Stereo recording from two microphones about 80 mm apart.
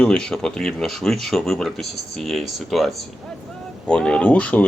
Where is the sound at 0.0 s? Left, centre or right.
Centre.